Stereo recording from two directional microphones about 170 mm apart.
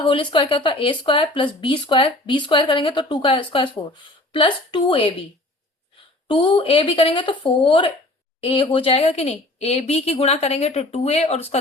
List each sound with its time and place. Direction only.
0.0 s a woman's voice: 30° left (ahead or behind)
6.2 s a woman's voice: 30° left (ahead or behind)